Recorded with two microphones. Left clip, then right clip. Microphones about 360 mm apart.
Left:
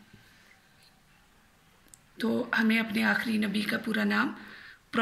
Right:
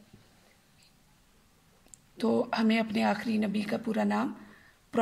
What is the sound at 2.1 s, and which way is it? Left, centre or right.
Speech, right.